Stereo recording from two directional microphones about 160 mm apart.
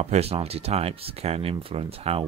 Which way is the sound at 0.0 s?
40° right (ahead or behind).